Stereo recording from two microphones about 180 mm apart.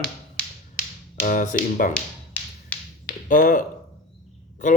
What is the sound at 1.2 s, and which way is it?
Speech, 45° left (ahead or behind).